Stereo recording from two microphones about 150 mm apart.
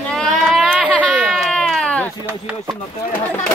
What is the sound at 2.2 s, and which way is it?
Speech, 15° right (ahead or behind).